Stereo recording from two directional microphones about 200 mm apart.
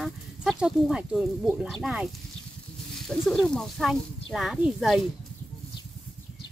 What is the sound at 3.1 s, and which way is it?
Speech, centre (ahead or behind).